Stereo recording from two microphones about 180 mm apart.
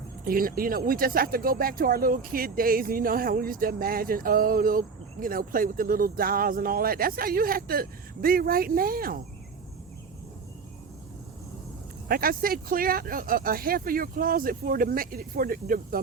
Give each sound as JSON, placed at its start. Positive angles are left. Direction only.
{"t": 0.3, "sound": "speech", "side_deg": -55}
{"t": 12.0, "sound": "speech", "side_deg": -55}